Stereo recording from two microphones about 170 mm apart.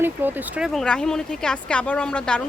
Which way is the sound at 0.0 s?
10° right (ahead or behind).